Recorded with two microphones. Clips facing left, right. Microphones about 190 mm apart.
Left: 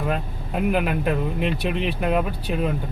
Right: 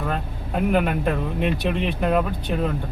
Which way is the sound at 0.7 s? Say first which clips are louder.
Right 1 dB; 5° left (ahead or behind).